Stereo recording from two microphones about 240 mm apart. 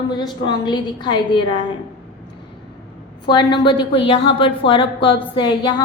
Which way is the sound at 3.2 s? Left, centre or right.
Centre.